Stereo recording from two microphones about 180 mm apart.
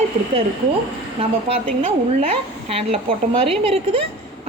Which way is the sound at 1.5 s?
35° right (ahead or behind).